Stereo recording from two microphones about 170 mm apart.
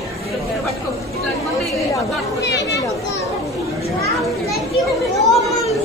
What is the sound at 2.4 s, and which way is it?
Chatter, 90° left.